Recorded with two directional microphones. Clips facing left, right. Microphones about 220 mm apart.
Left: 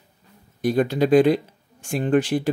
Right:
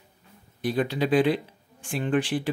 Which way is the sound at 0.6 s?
45° left (ahead or behind).